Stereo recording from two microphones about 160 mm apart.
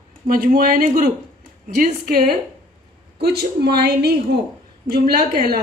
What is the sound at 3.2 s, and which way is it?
Speech, 85° right.